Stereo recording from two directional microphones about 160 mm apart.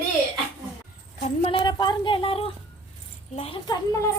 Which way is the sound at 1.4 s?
35° left (ahead or behind).